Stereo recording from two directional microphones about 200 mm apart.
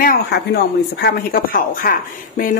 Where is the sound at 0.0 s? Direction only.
45° left (ahead or behind).